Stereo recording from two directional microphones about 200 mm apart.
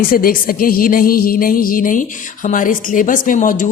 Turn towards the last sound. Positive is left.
turn(degrees=40)  # may be behind; listen again after turning